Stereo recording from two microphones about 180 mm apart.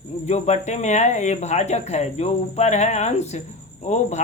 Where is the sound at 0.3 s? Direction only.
40° left (ahead or behind).